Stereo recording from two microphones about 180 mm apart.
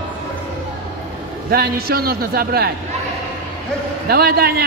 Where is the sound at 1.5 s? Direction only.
60° right (ahead or behind).